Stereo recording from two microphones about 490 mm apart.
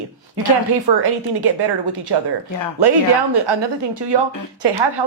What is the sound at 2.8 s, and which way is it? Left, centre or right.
Speech, right.